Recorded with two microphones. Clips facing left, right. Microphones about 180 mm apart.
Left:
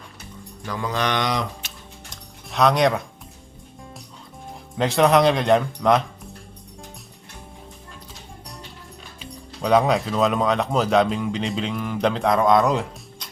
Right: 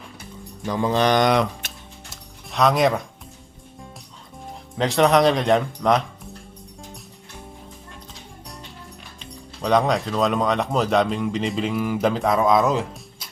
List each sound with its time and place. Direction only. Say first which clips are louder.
0.6 s speech: right 5 dB; 25° right (ahead or behind)
1.3 s speech: right 6 dB; 60° right (ahead or behind)
2.0 s music: left 1 dB; centre (ahead or behind)
4.8 s speech: even; centre (ahead or behind)
9.1 s speech: left 4 dB; 5° left (ahead or behind)